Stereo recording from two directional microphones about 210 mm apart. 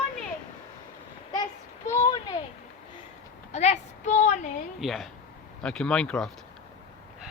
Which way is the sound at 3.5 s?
30° left (ahead or behind).